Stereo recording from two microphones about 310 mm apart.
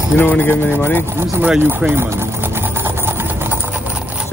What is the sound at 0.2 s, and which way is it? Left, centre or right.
Speech, centre.